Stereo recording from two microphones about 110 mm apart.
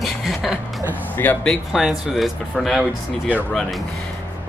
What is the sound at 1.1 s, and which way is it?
Speech, 15° left (ahead or behind).